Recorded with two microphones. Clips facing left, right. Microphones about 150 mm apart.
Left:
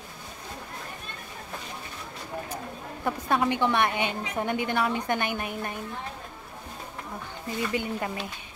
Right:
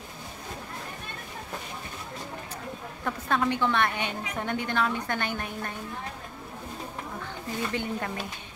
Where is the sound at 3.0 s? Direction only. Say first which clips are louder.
Left 2 dB; 15° left (ahead or behind).